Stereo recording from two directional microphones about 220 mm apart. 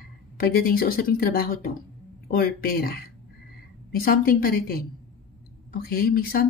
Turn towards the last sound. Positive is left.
turn(degrees=40)  # may be behind; listen again after turning